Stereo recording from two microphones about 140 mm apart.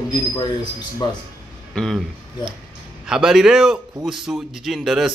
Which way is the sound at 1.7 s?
5° left (ahead or behind).